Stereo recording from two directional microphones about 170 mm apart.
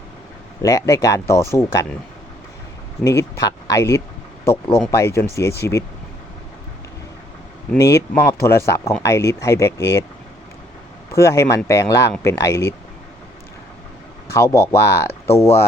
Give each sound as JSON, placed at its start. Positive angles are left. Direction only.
{"t": 0.6, "sound": "speech", "side_deg": 20}
{"t": 3.0, "sound": "speech", "side_deg": 20}
{"t": 7.8, "sound": "speech", "side_deg": 20}
{"t": 11.1, "sound": "speech", "side_deg": 20}
{"t": 14.3, "sound": "speech", "side_deg": 15}